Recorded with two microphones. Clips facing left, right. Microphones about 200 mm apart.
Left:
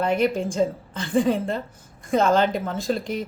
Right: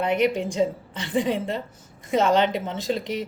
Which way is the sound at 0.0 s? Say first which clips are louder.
Even; 20° right (ahead or behind).